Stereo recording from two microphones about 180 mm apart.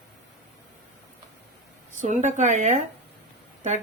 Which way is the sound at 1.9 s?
45° right (ahead or behind).